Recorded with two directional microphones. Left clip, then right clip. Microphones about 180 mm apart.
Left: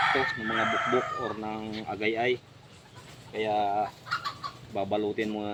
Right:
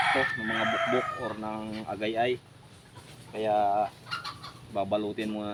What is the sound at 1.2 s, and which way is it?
Speech, 20° right (ahead or behind).